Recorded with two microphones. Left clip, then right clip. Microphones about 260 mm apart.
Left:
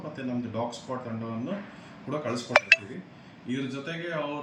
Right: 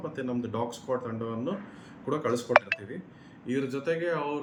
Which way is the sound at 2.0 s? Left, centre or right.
Centre.